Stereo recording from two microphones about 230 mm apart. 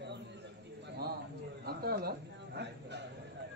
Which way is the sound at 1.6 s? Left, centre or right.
Right.